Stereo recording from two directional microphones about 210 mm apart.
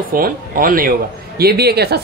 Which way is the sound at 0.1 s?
40° right (ahead or behind).